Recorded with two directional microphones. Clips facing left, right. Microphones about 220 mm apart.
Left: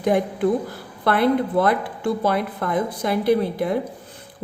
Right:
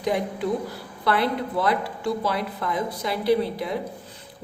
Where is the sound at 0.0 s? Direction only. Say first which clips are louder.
Left 6 dB; 50° left (ahead or behind).